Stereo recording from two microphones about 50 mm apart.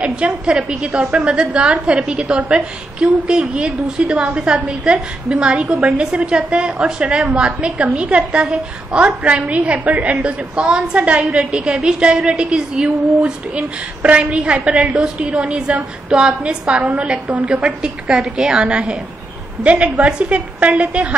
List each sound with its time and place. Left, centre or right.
0.0 s a woman's voice: right